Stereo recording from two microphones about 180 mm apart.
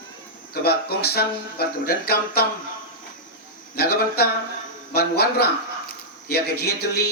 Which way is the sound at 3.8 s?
60° left (ahead or behind).